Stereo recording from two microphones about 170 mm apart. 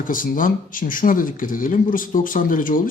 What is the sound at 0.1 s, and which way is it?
Speech, 55° left (ahead or behind).